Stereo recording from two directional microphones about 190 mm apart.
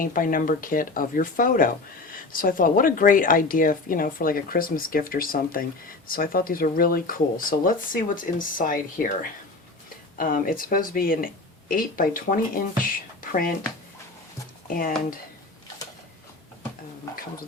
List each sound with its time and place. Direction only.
0.0 s speech: 45° left (ahead or behind)
10.2 s speech: 50° left (ahead or behind)
14.7 s speech: 50° left (ahead or behind)